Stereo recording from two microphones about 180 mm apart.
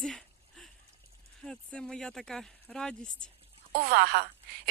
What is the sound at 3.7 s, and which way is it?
Speech, 60° right (ahead or behind).